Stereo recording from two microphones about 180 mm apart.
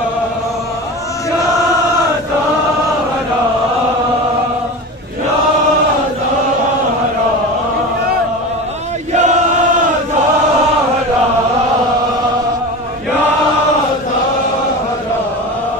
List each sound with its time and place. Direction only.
9.1 s chant: 40° right (ahead or behind)